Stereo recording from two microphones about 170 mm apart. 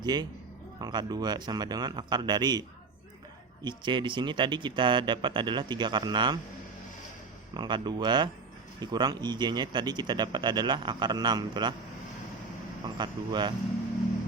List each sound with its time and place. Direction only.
0.0 s speech: 25° right (ahead or behind)
7.5 s speech: 25° right (ahead or behind)
12.8 s speech: 25° right (ahead or behind)